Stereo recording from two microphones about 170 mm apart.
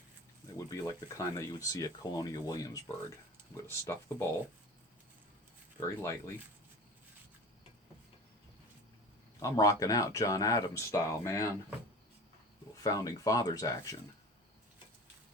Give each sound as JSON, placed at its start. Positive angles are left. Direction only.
{"t": 0.5, "sound": "speech", "side_deg": 20}
{"t": 5.8, "sound": "speech", "side_deg": 15}
{"t": 9.4, "sound": "speech", "side_deg": 20}
{"t": 12.7, "sound": "speech", "side_deg": 20}